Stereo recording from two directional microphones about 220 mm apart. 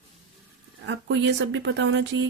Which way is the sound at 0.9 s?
55° right (ahead or behind).